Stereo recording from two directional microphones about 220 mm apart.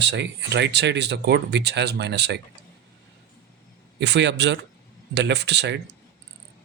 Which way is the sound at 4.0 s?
50° right (ahead or behind).